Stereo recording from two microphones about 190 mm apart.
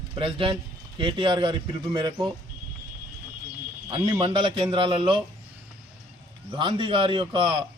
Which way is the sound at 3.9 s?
25° right (ahead or behind).